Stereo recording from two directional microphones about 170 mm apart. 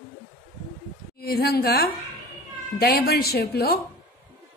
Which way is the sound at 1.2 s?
65° left (ahead or behind).